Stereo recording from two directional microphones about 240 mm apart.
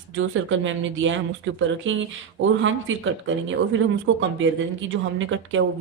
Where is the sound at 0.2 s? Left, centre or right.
Right.